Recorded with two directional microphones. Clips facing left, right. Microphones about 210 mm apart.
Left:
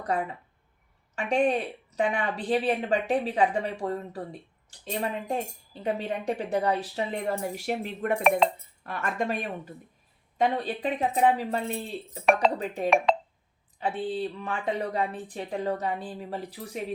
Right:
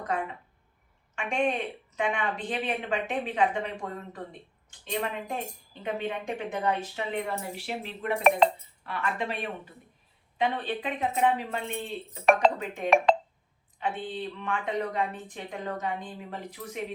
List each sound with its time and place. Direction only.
1.1 s speech: 35° left (ahead or behind)